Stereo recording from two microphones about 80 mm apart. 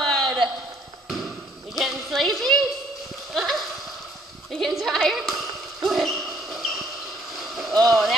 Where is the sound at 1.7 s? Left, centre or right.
Centre.